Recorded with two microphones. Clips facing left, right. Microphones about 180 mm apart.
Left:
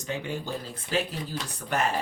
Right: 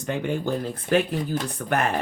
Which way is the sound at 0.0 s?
55° right (ahead or behind).